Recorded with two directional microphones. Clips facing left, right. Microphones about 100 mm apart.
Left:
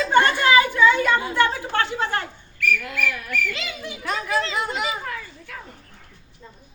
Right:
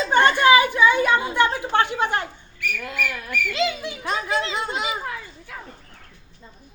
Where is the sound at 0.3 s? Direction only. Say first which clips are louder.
Right 2 dB; 15° right (ahead or behind).